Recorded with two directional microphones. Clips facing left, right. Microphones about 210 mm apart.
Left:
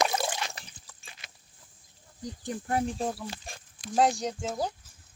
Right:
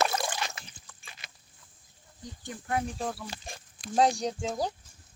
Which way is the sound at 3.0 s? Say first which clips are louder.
Left 3 dB; 20° left (ahead or behind).